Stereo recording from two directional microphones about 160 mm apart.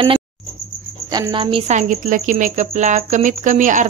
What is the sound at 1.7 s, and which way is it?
Speech, 50° right (ahead or behind).